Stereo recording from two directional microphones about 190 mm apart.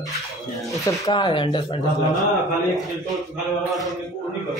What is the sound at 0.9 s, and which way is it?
Speech, 20° left (ahead or behind).